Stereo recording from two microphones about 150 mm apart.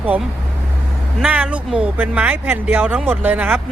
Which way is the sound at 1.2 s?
10° right (ahead or behind).